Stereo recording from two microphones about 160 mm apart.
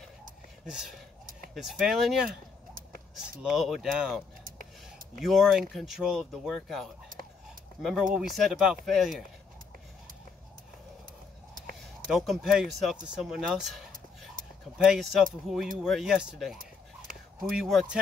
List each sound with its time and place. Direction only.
0.7 s speech: 5° right (ahead or behind)
4.5 s a sound: 60° right (ahead or behind)
5.2 s speech: centre (ahead or behind)
12.1 s speech: centre (ahead or behind)
17.6 s speech: centre (ahead or behind)